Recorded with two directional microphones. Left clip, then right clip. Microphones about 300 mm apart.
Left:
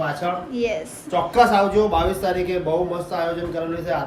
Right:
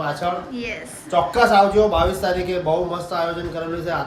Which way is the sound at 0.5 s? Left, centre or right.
Centre.